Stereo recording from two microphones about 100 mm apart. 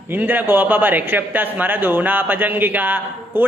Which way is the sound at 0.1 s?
20° right (ahead or behind).